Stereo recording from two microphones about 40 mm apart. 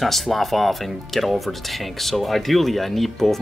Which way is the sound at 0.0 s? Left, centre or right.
Centre.